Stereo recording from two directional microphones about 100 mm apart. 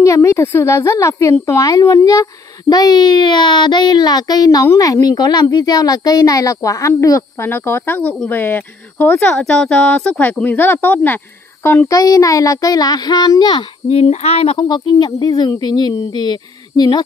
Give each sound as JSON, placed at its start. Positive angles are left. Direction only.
{"t": 0.0, "sound": "a woman's voice", "side_deg": 30}
{"t": 9.3, "sound": "speech", "side_deg": 5}
{"t": 11.9, "sound": "a child's voice", "side_deg": 35}
{"t": 13.8, "sound": "a sound", "side_deg": 90}
{"t": 15.0, "sound": "speech", "side_deg": 45}